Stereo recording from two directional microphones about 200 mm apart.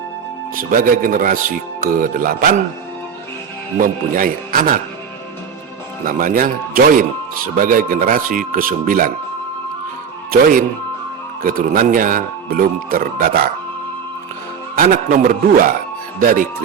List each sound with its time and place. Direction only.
0.5 s speech: 45° right (ahead or behind)
3.8 s speech: 45° right (ahead or behind)
6.1 s speech: 45° right (ahead or behind)
11.4 s speech: 45° right (ahead or behind)
14.8 s speech: 40° right (ahead or behind)